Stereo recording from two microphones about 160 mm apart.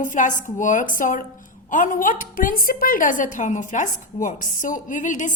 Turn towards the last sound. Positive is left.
turn(degrees=50)  # may be behind; listen again after turning